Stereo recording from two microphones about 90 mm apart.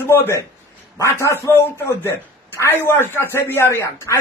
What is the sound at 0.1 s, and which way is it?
Speech, 30° left (ahead or behind).